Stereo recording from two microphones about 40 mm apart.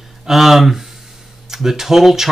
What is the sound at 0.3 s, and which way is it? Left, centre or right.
Speech, centre.